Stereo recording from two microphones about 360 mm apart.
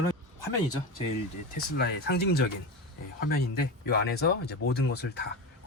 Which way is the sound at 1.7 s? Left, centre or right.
Left.